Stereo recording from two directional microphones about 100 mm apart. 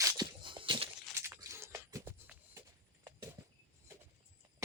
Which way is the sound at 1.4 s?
30° right (ahead or behind).